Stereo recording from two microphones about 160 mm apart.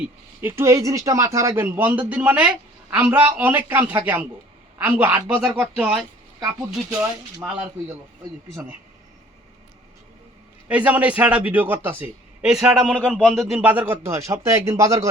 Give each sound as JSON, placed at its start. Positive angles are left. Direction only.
{"t": 0.0, "sound": "a man's voice", "side_deg": -15}
{"t": 7.4, "sound": "speech", "side_deg": -5}
{"t": 10.7, "sound": "a man's voice", "side_deg": -10}